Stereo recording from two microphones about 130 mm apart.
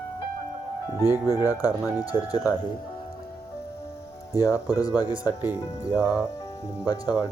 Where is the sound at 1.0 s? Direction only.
20° right (ahead or behind).